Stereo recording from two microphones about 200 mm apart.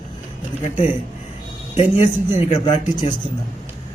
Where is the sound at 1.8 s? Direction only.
30° left (ahead or behind).